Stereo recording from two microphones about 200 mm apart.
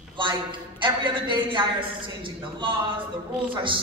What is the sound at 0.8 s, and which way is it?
Speech, 25° right (ahead or behind).